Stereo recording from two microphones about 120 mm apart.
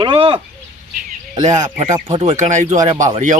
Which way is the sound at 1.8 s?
90° right.